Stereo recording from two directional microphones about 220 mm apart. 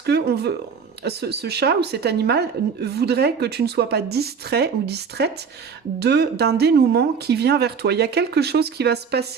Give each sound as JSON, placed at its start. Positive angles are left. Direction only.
{"t": 0.0, "sound": "speech", "side_deg": -45}